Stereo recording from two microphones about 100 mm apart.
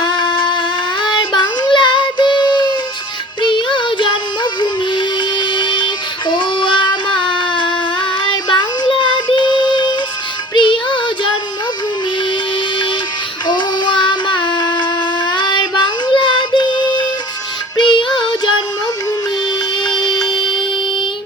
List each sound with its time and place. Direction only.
0.0 s a sound: 55° left (ahead or behind)
1.0 s child singing: 50° left (ahead or behind)
4.6 s music: 50° left (ahead or behind)
13.5 s music: 50° left (ahead or behind)
15.3 s child singing: 50° left (ahead or behind)
17.7 s music: 50° left (ahead or behind)
19.8 s music: 45° left (ahead or behind)